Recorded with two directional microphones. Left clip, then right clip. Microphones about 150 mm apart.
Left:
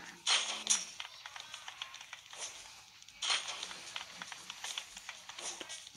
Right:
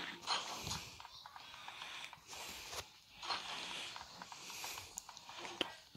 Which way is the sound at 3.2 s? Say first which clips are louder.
Left 7 dB; 40° left (ahead or behind).